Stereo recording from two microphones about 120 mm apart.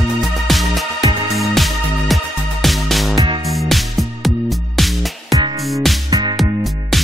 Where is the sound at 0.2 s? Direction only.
Centre (ahead or behind).